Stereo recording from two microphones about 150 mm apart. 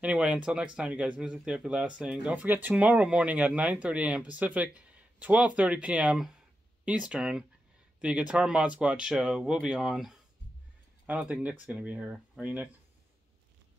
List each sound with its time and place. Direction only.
0.0 s speech: 10° right (ahead or behind)